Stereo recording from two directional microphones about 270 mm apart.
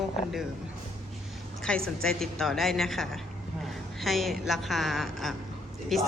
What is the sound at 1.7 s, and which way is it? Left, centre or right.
A woman's voice, centre.